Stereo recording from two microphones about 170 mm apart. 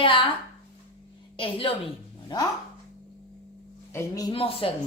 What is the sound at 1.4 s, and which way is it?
A woman's voice, 30° left (ahead or behind).